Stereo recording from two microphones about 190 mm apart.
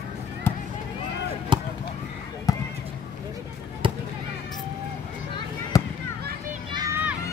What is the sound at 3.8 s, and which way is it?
Basketball bounce, 25° right (ahead or behind).